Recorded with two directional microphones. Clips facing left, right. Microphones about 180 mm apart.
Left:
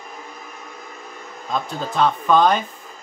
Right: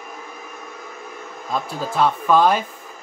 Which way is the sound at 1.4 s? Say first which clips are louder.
Even; 5° right (ahead or behind).